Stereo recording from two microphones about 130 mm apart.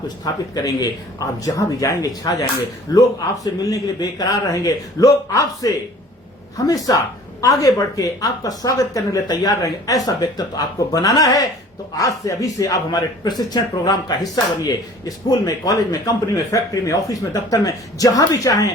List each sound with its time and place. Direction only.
0.5 s a man's voice: 30° left (ahead or behind)
6.9 s a man's voice: 30° left (ahead or behind)